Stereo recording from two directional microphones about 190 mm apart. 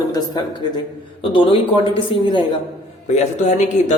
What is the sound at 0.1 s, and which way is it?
A man's voice, 20° left (ahead or behind).